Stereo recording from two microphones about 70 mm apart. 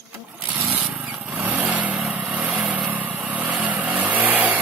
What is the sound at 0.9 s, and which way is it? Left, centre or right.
Vehicle, right.